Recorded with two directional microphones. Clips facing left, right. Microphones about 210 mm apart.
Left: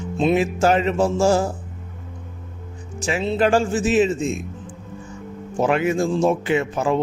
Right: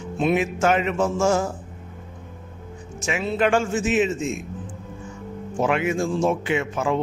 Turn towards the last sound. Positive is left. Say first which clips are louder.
# left 3 dB
turn(degrees=35)  # may be behind; listen again after turning